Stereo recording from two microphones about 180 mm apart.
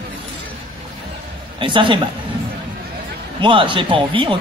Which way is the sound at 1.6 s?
25° right (ahead or behind).